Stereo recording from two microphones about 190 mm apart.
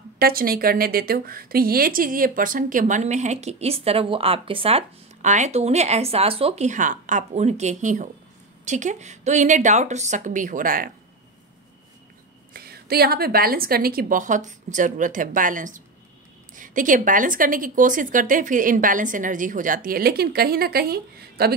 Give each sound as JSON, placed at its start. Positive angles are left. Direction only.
{"t": 0.2, "sound": "a woman's voice", "side_deg": -50}
{"t": 12.5, "sound": "speech", "side_deg": -55}